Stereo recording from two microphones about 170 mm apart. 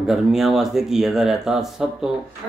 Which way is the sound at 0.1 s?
Centre (ahead or behind).